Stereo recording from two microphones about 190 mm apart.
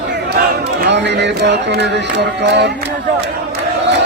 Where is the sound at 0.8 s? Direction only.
65° right (ahead or behind).